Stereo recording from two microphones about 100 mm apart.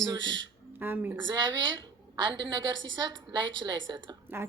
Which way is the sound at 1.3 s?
50° right (ahead or behind).